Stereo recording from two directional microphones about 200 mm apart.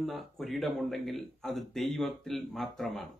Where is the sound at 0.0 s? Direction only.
Centre (ahead or behind).